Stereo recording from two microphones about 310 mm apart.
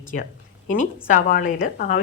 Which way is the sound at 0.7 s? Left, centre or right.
Left.